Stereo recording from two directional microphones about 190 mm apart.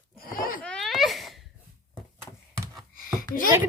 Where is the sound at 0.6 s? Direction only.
5° left (ahead or behind).